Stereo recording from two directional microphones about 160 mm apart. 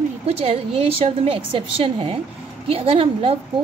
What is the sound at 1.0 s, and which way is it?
A woman's voice, 35° right (ahead or behind).